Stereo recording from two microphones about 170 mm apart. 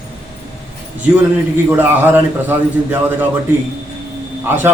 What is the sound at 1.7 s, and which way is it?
A man's voice, 10° right (ahead or behind).